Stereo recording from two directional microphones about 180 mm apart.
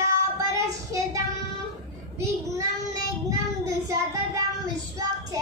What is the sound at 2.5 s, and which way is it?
Child singing, 20° right (ahead or behind).